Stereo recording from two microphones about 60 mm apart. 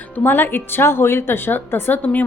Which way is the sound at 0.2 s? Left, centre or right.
Left.